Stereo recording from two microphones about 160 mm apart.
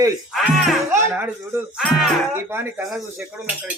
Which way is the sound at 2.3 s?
15° right (ahead or behind).